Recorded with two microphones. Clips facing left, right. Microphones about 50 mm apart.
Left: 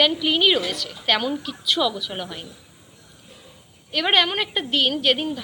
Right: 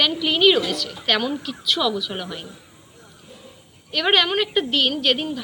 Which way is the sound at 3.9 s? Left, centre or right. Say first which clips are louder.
Right 1 dB; centre.